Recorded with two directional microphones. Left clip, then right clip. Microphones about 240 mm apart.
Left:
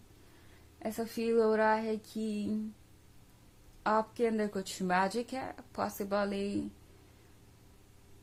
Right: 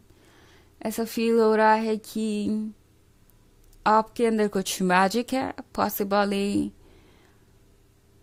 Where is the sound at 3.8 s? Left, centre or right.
Right.